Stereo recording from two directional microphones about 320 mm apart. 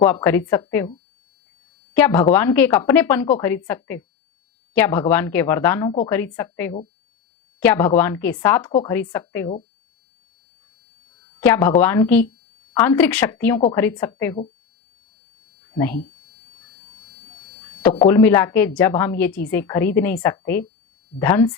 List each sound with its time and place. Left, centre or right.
0.0 s a woman's voice: centre
11.3 s a woman's voice: centre
17.9 s a woman's voice: centre